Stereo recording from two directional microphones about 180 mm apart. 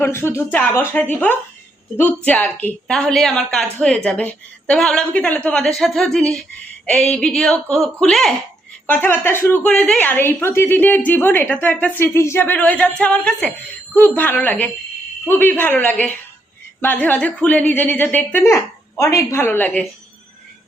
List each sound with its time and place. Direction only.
0.0 s a woman's voice: 15° left (ahead or behind)